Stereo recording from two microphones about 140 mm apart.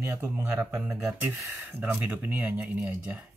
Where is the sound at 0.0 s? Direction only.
15° right (ahead or behind).